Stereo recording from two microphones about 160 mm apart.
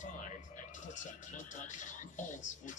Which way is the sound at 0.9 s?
50° left (ahead or behind).